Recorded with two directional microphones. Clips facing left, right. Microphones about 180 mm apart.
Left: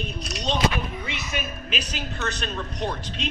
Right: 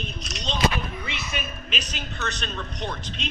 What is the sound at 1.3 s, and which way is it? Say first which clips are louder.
A woman's voice: left 4 dB; 10° left (ahead or behind).